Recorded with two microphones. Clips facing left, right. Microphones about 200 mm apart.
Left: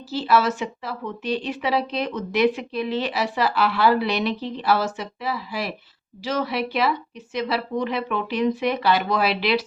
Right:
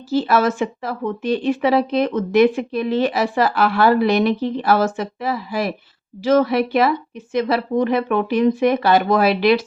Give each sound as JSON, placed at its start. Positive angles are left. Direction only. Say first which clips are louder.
{"t": 0.1, "sound": "a woman's voice", "louder": "right 4 dB", "side_deg": -50}